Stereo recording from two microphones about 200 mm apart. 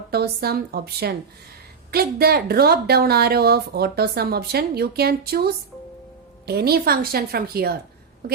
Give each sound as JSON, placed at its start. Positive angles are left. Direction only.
{"t": 0.1, "sound": "a woman's voice", "side_deg": -50}